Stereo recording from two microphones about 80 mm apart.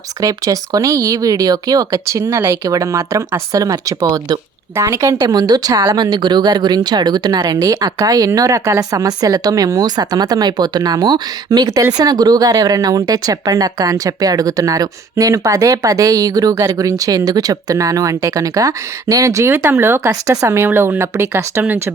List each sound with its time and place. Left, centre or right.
0.2 s speech: right
5.3 s speech: right
20.1 s speech: right